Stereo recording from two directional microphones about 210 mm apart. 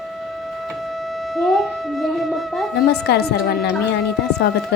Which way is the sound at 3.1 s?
50° left (ahead or behind).